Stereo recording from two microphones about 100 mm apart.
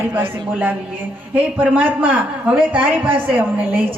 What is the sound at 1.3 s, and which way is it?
A man's voice, 10° right (ahead or behind).